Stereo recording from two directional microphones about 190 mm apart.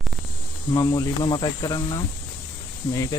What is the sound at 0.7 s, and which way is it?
Speech, 20° left (ahead or behind).